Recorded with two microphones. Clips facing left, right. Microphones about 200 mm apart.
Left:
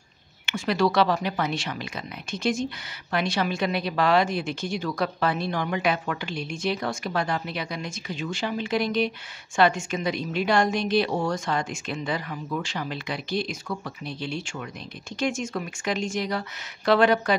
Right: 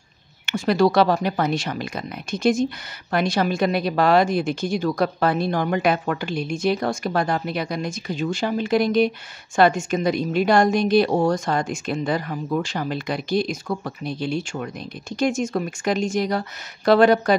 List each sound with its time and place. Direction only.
0.5 s speech: 40° right (ahead or behind)